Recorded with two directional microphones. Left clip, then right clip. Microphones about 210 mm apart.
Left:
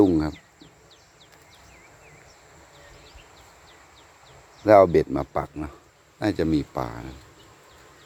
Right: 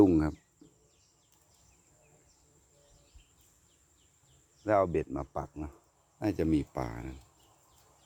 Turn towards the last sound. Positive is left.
turn(degrees=-25)  # may be behind; listen again after turning